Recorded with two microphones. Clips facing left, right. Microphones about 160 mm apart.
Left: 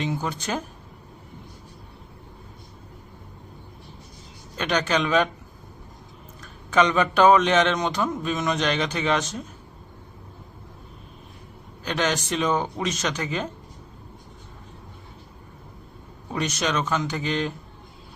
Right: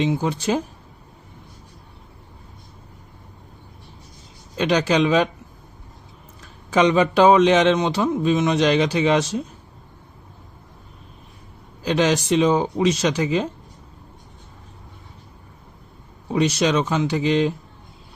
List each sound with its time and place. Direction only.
0.0 s speech: 25° right (ahead or behind)
4.5 s speech: 30° right (ahead or behind)
6.7 s a man's voice: 30° right (ahead or behind)
11.9 s a man's voice: 30° right (ahead or behind)
16.4 s speech: 30° right (ahead or behind)